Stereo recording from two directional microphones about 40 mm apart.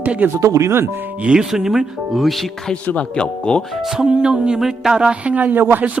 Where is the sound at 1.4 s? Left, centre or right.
Centre.